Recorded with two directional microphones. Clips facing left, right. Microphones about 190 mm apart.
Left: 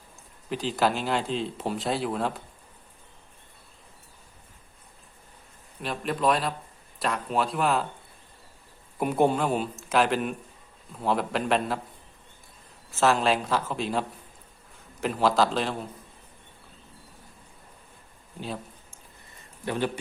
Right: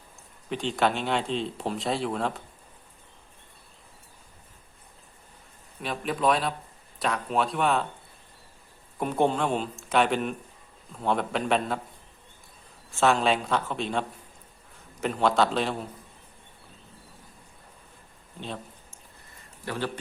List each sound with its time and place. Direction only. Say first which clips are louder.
0.5 s speech: even; 5° left (ahead or behind)
5.8 s speech: even; centre (ahead or behind)
9.0 s speech: left 2 dB; 10° left (ahead or behind)
12.9 s speech: even; centre (ahead or behind)
15.0 s speech: even; centre (ahead or behind)
18.3 s speech: left 2 dB; 5° left (ahead or behind)
19.6 s a man's voice: left 3 dB; 20° left (ahead or behind)